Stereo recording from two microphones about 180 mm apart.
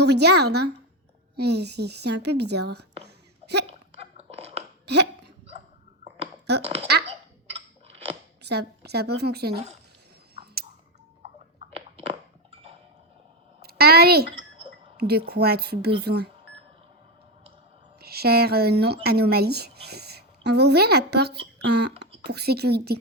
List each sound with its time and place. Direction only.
0.0 s a woman's voice: 65° right (ahead or behind)
4.2 s a sound: 35° right (ahead or behind)
4.9 s hiccup: 65° right (ahead or behind)
6.6 s speech: 35° right (ahead or behind)
8.4 s a woman's voice: 65° right (ahead or behind)
10.3 s a sound: 60° right (ahead or behind)
11.9 s a sound: 30° right (ahead or behind)
13.6 s a woman's voice: 60° right (ahead or behind)
18.0 s a woman's voice: 60° right (ahead or behind)